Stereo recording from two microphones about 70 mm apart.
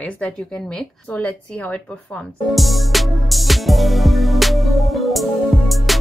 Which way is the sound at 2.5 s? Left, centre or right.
Centre.